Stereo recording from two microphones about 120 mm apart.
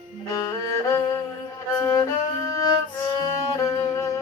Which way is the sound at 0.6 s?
25° left (ahead or behind).